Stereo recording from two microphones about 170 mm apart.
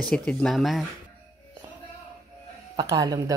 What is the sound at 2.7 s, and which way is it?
Speech, 25° right (ahead or behind).